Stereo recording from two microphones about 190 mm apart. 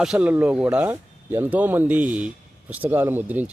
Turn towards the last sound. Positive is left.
turn(degrees=-10)  # may be behind; listen again after turning